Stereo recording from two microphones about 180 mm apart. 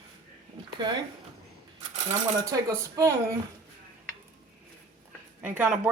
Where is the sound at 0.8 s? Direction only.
25° right (ahead or behind).